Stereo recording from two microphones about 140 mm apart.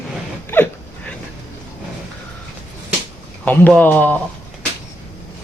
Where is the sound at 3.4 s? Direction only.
10° left (ahead or behind).